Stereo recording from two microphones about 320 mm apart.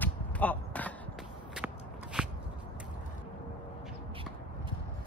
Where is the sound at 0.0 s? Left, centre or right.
Centre.